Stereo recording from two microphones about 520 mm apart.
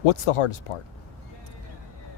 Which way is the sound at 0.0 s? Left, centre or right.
Left.